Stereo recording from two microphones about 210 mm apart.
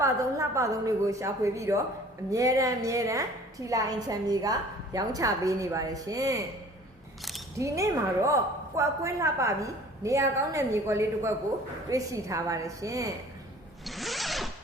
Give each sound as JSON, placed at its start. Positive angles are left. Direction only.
{"t": 0.0, "sound": "a woman's voice", "side_deg": -15}
{"t": 7.2, "sound": "single-lens reflex camera", "side_deg": 0}
{"t": 7.6, "sound": "a woman's voice", "side_deg": -15}
{"t": 13.8, "sound": "zipper", "side_deg": 0}